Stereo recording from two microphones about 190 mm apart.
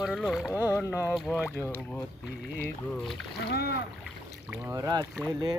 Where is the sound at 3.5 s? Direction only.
55° left (ahead or behind).